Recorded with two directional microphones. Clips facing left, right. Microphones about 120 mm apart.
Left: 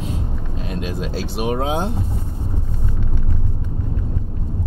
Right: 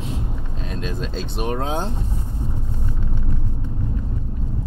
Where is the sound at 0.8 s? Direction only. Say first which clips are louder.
Left 2 dB; 10° left (ahead or behind).